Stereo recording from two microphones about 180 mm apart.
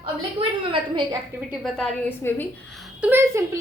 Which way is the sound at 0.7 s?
25° right (ahead or behind).